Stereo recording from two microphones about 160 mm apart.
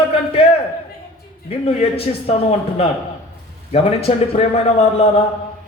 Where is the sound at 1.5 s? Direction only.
35° left (ahead or behind).